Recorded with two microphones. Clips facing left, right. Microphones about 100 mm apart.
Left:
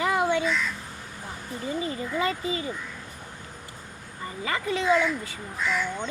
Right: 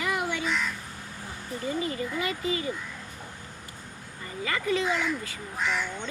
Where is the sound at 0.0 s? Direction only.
25° left (ahead or behind).